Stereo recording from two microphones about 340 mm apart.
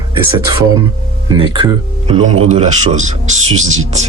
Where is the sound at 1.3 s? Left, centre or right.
Centre.